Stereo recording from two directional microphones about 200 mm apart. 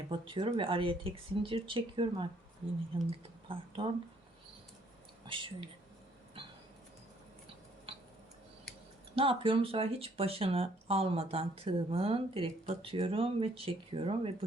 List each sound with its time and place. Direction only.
0.1 s speech: 25° right (ahead or behind)
5.2 s speech: 25° right (ahead or behind)
7.9 s a sound: 30° right (ahead or behind)
9.1 s speech: 25° right (ahead or behind)